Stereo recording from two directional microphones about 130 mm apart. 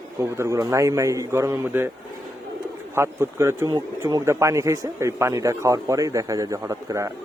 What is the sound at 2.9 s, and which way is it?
A man's voice, 20° right (ahead or behind).